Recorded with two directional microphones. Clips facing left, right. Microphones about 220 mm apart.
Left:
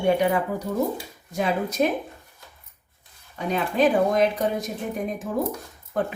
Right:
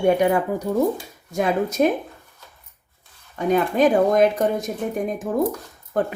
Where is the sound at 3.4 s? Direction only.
45° right (ahead or behind).